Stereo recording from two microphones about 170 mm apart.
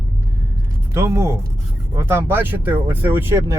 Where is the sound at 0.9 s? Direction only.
15° right (ahead or behind).